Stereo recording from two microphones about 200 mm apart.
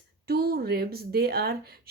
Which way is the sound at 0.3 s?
50° right (ahead or behind).